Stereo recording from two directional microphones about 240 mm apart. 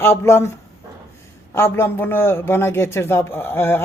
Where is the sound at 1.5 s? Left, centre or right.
Centre.